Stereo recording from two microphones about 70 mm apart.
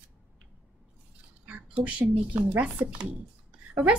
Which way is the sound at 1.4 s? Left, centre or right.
Centre.